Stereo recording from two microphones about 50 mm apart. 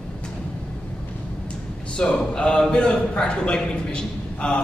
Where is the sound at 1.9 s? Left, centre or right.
Centre.